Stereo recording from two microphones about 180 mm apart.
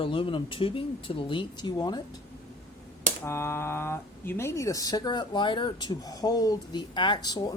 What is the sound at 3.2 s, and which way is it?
Speech, 15° left (ahead or behind).